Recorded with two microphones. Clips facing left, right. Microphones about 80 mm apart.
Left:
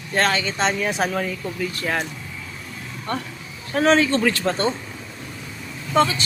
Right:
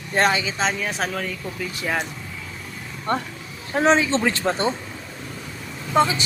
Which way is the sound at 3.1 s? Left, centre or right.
Right.